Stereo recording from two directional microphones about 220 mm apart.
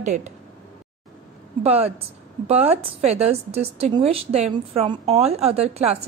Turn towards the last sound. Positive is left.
turn(degrees=-30)  # may be behind; listen again after turning